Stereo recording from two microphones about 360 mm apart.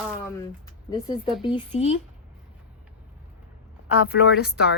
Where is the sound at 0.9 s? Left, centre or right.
Centre.